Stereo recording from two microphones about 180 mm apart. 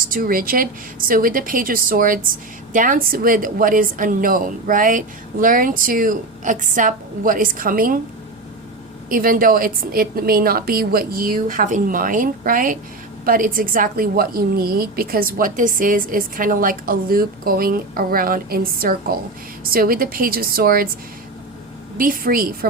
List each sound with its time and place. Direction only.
0.0 s a woman's voice: 50° right (ahead or behind)
9.0 s a woman's voice: 50° right (ahead or behind)
21.9 s a woman's voice: 50° right (ahead or behind)